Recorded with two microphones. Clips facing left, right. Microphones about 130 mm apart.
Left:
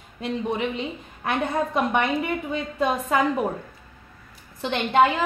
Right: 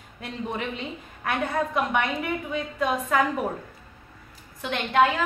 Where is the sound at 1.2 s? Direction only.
30° left (ahead or behind).